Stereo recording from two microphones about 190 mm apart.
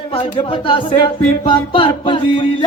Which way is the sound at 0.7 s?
25° left (ahead or behind).